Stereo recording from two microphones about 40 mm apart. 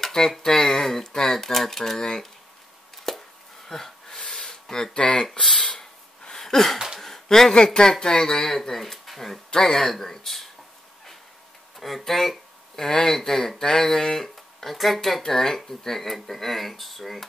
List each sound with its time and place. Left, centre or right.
0.0 s a sound: centre
0.4 s speech: centre
3.1 s chopping: centre
3.6 s wheeze: centre
4.3 s a sound: centre
4.9 s speech: left
5.4 s speech: centre
5.7 s a sound: centre
7.5 s speech: centre
11.8 s speech: centre